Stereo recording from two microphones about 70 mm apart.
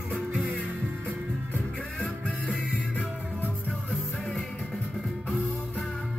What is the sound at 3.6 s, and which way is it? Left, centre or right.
Music, centre.